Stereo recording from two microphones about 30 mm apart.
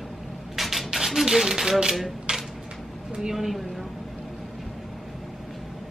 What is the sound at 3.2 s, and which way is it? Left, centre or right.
Speech, centre.